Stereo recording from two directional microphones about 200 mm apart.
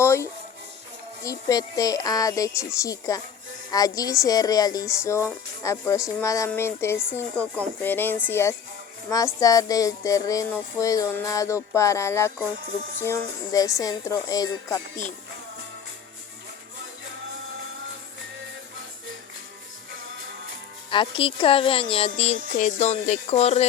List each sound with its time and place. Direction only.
0.0 s music: 15° left (ahead or behind)
3.7 s a woman's voice: 20° left (ahead or behind)
5.6 s music: 15° left (ahead or behind)
20.9 s a woman's voice: 25° left (ahead or behind)